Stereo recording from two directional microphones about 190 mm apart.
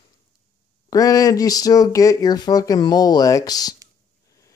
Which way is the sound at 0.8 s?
20° left (ahead or behind).